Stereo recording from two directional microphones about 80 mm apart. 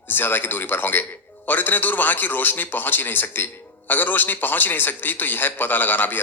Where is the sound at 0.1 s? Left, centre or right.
Left.